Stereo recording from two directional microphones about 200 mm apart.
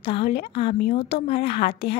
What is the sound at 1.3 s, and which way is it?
Speech, 50° left (ahead or behind).